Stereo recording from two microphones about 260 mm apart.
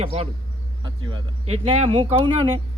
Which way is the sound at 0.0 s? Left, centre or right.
Right.